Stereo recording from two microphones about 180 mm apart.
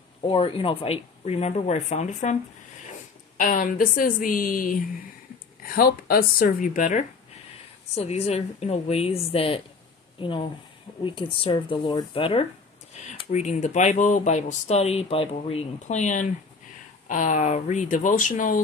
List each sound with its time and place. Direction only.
0.3 s speech: 30° left (ahead or behind)
3.3 s speech: 45° left (ahead or behind)